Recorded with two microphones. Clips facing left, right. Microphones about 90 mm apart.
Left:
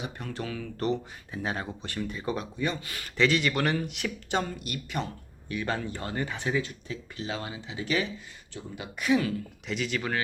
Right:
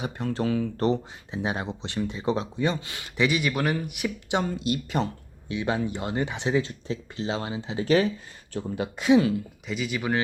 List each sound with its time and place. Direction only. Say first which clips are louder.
0.0 s speech: right 8 dB; 35° right (ahead or behind)
1.3 s speech: right 4 dB; 20° right (ahead or behind)
3.2 s a man's voice: even; 10° right (ahead or behind)
4.6 s speech: right 7 dB; 30° right (ahead or behind)
5.5 s speech: right 4 dB; 20° right (ahead or behind)
9.6 s speech: even; 5° right (ahead or behind)